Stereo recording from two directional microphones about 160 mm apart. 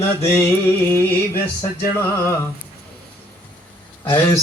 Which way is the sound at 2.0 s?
15° left (ahead or behind).